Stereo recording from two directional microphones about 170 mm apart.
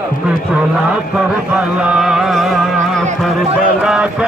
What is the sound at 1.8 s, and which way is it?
Chant, 5° right (ahead or behind).